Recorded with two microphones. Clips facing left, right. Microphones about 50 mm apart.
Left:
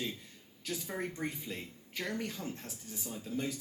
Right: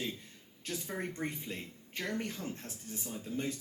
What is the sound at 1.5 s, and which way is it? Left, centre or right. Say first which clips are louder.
Speech: even; right.